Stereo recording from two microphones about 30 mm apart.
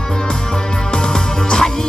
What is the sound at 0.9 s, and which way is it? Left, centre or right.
Music, left.